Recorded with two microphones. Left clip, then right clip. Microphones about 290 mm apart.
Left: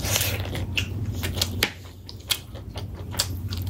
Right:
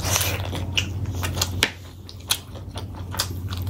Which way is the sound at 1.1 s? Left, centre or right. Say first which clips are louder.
Right 1 dB; centre.